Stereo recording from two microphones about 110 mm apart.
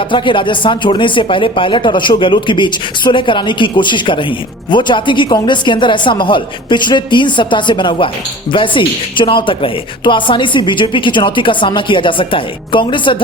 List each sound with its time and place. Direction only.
0.0 s speech: 50° left (ahead or behind)